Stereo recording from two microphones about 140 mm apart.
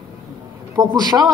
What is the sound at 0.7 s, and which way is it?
Speech, 30° right (ahead or behind).